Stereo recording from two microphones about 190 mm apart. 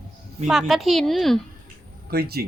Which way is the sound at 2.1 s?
55° right (ahead or behind).